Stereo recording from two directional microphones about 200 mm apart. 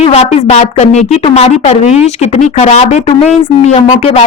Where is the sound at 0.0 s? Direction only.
30° left (ahead or behind).